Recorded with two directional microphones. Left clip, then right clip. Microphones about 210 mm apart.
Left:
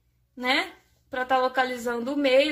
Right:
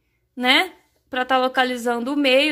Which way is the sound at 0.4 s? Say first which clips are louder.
Right 7 dB; 35° right (ahead or behind).